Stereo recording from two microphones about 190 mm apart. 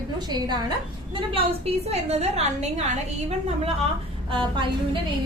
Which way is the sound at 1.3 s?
30° right (ahead or behind).